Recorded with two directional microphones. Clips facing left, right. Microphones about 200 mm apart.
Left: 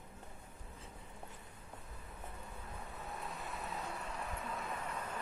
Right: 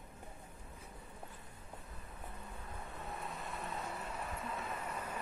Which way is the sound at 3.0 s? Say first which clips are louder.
Right 1 dB; centre (ahead or behind).